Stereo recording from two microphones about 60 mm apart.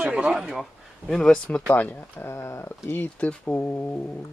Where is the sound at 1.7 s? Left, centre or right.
Left.